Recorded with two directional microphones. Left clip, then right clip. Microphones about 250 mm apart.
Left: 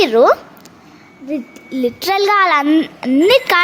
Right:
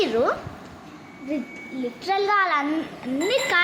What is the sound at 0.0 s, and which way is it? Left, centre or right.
Speech, left.